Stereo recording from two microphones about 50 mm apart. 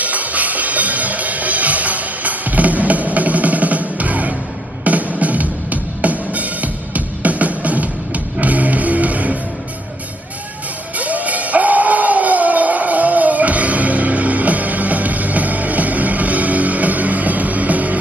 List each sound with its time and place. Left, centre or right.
0.0 s music: right
11.0 s music: right